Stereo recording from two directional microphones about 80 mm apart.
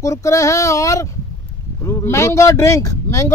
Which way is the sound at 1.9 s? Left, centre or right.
Left.